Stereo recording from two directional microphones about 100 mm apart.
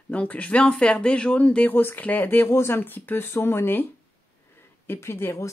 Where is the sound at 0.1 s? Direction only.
15° left (ahead or behind).